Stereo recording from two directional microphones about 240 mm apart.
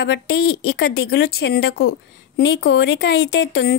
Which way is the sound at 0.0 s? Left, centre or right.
Left.